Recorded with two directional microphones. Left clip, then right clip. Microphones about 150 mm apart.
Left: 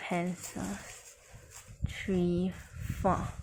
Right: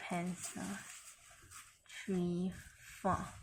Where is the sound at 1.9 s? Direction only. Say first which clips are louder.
Left 8 dB; 45° left (ahead or behind).